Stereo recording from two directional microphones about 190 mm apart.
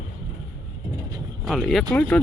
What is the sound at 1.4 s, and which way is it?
Speech, centre (ahead or behind).